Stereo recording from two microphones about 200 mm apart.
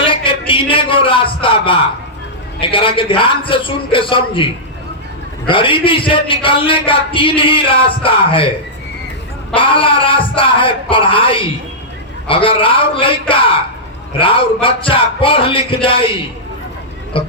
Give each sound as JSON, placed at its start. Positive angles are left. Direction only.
{"t": 0.0, "sound": "a sound", "side_deg": 25}
{"t": 2.6, "sound": "a man's voice", "side_deg": 25}
{"t": 5.5, "sound": "a man's voice", "side_deg": 25}
{"t": 9.6, "sound": "a man's voice", "side_deg": 25}
{"t": 14.2, "sound": "a man's voice", "side_deg": 25}